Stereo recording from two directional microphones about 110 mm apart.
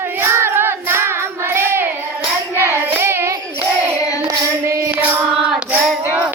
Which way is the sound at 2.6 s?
25° right (ahead or behind).